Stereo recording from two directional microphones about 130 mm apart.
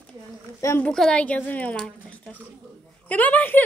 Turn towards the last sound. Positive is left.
turn(degrees=10)  # may be behind; listen again after turning